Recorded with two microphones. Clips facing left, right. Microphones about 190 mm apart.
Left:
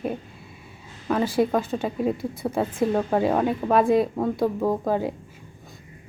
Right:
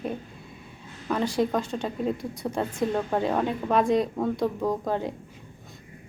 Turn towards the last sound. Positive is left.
turn(degrees=5)  # may be behind; listen again after turning